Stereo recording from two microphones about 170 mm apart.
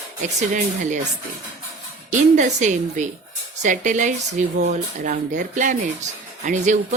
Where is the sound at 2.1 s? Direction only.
45° right (ahead or behind).